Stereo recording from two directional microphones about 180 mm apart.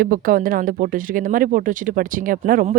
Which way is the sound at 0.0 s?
55° right (ahead or behind).